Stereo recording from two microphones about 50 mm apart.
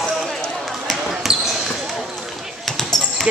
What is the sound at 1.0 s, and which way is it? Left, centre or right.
Basketball bounce, centre.